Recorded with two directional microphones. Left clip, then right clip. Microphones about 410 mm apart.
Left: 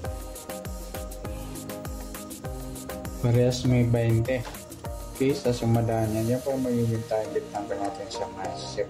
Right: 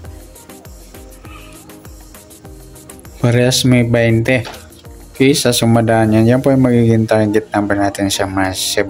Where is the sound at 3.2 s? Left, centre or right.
Centre.